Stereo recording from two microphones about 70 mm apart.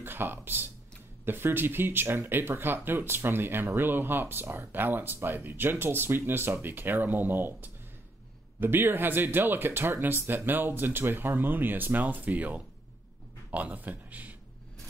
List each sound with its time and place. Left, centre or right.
0.0 s speech: right